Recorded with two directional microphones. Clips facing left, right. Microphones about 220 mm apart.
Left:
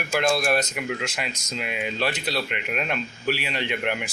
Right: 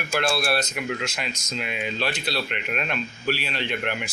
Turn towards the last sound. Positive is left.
turn(degrees=15)  # may be behind; listen again after turning